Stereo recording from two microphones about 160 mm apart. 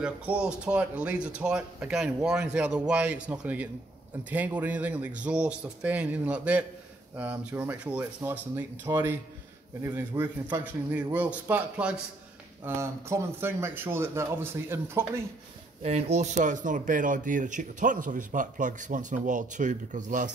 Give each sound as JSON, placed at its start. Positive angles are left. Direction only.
{"t": 0.0, "sound": "speech", "side_deg": -5}
{"t": 15.8, "sound": "speech", "side_deg": -45}